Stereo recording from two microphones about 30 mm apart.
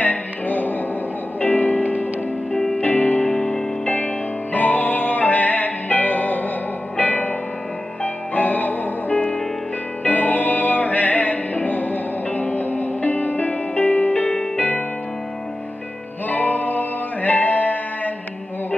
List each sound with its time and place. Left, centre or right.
0.0 s music: left
1.4 s music: left
2.5 s music: centre
2.8 s music: left
3.2 s music: left
3.8 s music: left
7.0 s music: left
8.0 s music: left
16.3 s music: left